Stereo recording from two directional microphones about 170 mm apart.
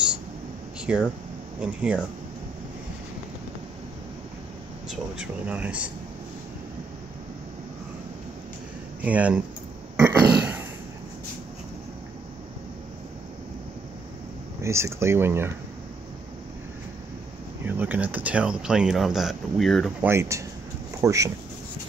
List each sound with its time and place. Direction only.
0.7 s a sound: 5° right (ahead or behind)
1.6 s speech: 5° right (ahead or behind)
4.8 s speech: 5° right (ahead or behind)
9.0 s speech: 10° right (ahead or behind)
9.9 s burping: 10° right (ahead or behind)
14.6 s speech: 15° right (ahead or behind)
17.6 s speech: 10° right (ahead or behind)
20.0 s speech: 15° right (ahead or behind)